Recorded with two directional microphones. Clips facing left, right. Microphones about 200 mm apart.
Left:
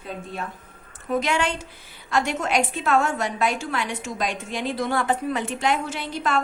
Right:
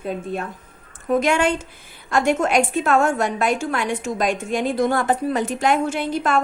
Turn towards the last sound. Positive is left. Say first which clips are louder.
# right 5 dB
turn(degrees=-50)  # may be behind; listen again after turning